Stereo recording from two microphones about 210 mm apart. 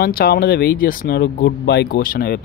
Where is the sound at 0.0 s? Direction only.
45° left (ahead or behind).